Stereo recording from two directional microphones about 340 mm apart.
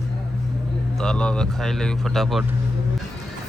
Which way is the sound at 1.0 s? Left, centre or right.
Centre.